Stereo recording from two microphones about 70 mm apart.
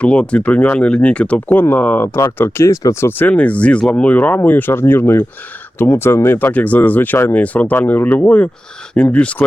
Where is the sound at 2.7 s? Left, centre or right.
Left.